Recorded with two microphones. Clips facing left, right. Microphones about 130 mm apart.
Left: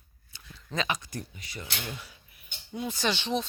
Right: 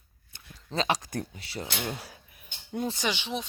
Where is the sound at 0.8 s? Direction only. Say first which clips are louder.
Right 4 dB; 90° right.